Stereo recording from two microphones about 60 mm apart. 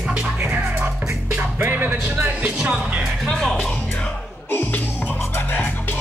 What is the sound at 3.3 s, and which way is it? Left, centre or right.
Speech, centre.